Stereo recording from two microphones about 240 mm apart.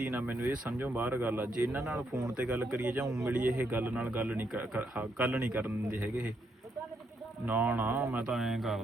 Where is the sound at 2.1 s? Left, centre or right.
Centre.